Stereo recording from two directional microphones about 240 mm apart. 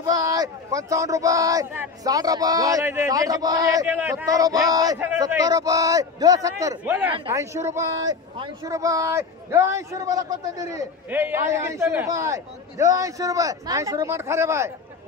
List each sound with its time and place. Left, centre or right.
0.0 s speech: centre